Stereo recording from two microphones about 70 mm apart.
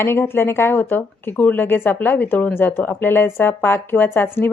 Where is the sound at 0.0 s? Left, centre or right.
Left.